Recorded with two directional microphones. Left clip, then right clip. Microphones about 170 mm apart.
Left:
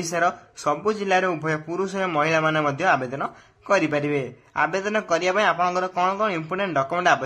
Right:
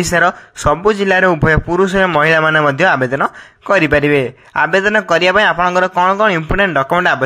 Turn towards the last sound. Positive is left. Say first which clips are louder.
# right 7 dB
turn(degrees=-35)  # may be behind; listen again after turning